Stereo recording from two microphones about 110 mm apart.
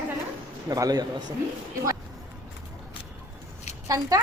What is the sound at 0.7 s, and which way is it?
Speech, 35° right (ahead or behind).